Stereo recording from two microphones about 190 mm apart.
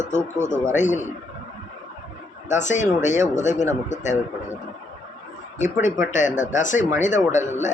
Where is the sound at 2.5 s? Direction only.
40° left (ahead or behind).